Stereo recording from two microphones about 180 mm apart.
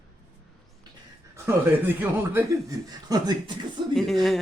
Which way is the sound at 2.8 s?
20° right (ahead or behind).